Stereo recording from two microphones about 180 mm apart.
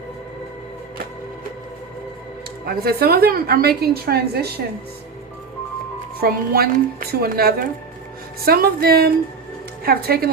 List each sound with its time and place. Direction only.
2.6 s a woman's voice: 60° right (ahead or behind)
6.1 s a woman's voice: 60° right (ahead or behind)